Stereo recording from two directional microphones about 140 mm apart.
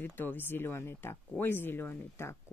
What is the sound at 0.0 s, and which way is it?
Speech, 15° left (ahead or behind).